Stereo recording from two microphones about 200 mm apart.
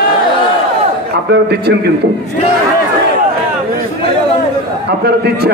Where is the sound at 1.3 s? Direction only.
55° right (ahead or behind).